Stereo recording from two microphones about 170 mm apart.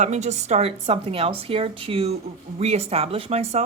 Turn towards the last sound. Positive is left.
turn(degrees=-40)  # may be behind; listen again after turning